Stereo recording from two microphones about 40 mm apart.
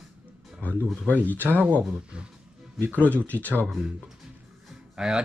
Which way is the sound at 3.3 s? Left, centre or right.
Left.